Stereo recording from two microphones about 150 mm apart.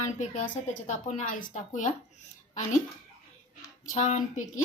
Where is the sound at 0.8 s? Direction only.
55° left (ahead or behind).